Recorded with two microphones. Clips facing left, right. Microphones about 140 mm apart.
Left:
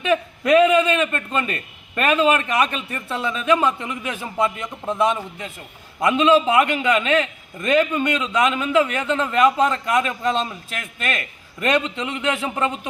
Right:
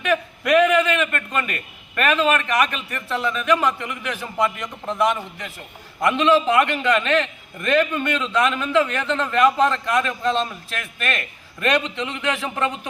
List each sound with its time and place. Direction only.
0.0 s a man's voice: 20° left (ahead or behind)